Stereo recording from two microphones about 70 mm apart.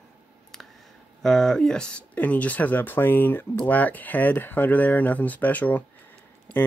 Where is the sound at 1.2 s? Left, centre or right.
Centre.